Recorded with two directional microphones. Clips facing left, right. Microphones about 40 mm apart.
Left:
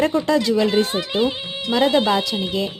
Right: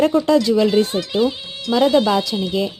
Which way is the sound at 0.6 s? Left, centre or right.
Left.